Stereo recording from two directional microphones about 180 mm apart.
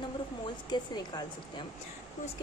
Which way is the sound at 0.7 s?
25° left (ahead or behind).